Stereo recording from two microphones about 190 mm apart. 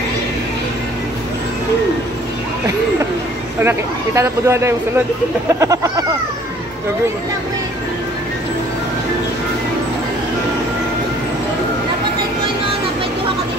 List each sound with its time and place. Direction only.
3.6 s speech: 15° right (ahead or behind)